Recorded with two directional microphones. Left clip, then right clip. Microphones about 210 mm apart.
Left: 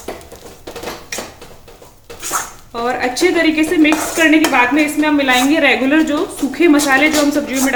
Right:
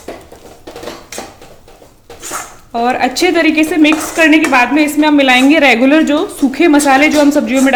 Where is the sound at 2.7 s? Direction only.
40° right (ahead or behind).